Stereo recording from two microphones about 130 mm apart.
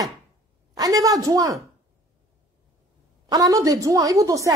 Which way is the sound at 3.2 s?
30° right (ahead or behind).